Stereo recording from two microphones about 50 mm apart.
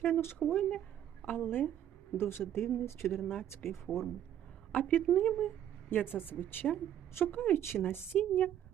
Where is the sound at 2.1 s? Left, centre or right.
Left.